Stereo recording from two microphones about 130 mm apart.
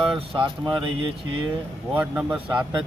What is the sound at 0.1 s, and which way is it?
Speech, 40° right (ahead or behind).